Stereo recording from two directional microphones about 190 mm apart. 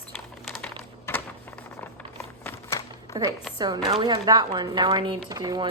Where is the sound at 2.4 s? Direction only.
15° left (ahead or behind).